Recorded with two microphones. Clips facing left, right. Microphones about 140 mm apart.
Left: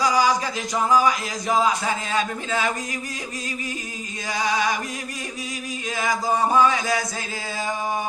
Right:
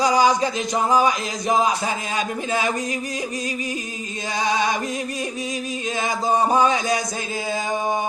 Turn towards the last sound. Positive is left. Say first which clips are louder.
# right 1 dB
turn(degrees=-20)  # may be behind; listen again after turning